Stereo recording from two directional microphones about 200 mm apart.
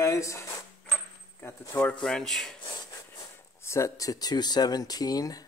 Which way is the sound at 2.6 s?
25° left (ahead or behind).